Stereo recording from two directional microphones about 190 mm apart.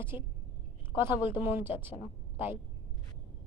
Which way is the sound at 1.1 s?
25° left (ahead or behind).